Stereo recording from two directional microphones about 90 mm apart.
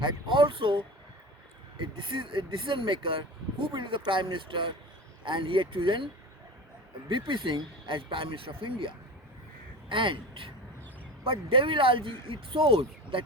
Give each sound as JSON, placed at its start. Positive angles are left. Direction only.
{"t": 0.0, "sound": "speech", "side_deg": -65}
{"t": 1.8, "sound": "speech", "side_deg": -65}
{"t": 7.1, "sound": "speech", "side_deg": -65}
{"t": 11.2, "sound": "speech", "side_deg": -80}